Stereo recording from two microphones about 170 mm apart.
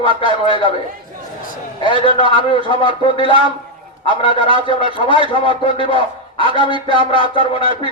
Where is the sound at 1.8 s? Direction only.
30° right (ahead or behind).